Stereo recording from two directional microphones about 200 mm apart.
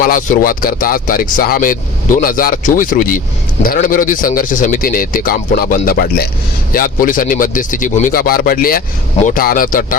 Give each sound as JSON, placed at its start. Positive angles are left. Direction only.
{"t": 0.0, "sound": "a man's voice", "side_deg": 40}